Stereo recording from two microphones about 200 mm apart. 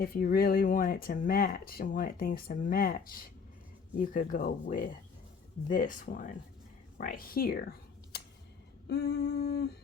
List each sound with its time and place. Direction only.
0.0 s speech: 50° left (ahead or behind)
8.9 s humming: 55° left (ahead or behind)